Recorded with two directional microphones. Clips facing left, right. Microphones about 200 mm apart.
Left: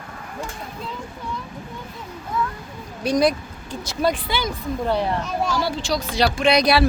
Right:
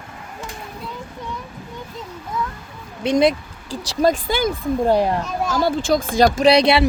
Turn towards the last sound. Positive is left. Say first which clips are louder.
# right 3 dB
turn(degrees=-25)  # may be behind; listen again after turning